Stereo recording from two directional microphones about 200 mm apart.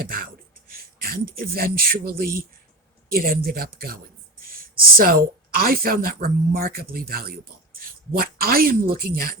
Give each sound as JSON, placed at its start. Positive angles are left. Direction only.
{"t": 0.0, "sound": "speech", "side_deg": -45}
{"t": 4.4, "sound": "a sound", "side_deg": -45}
{"t": 5.5, "sound": "speech", "side_deg": -50}